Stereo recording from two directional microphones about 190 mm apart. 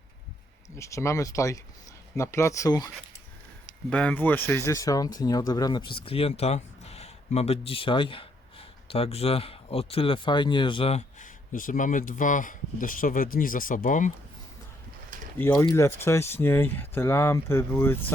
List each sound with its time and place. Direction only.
0.8 s speech: 15° left (ahead or behind)
3.8 s speech: 5° left (ahead or behind); by 11.3 s 30° left (ahead or behind)
11.5 s speech: 45° left (ahead or behind)
15.4 s speech: 10° left (ahead or behind)